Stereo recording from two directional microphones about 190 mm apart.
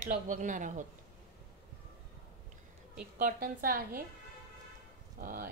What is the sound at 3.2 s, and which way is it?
Speech, 50° right (ahead or behind).